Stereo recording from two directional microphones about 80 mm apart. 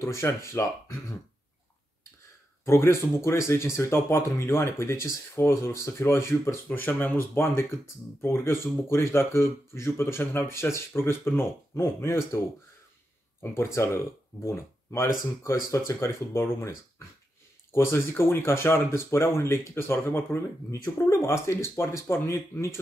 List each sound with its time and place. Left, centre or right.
0.0 s speech: left
2.6 s speech: left
13.7 s speech: left
17.7 s speech: left